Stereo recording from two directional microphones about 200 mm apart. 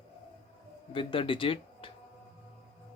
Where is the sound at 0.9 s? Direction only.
25° left (ahead or behind).